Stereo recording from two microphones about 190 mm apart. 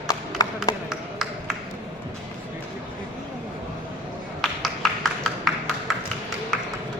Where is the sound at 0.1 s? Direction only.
20° left (ahead or behind).